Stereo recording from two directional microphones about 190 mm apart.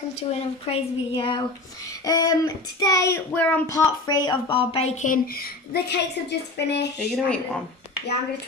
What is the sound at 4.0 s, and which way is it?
A woman's voice, 20° left (ahead or behind).